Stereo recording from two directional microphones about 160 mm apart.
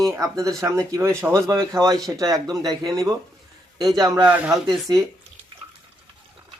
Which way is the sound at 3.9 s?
25° right (ahead or behind).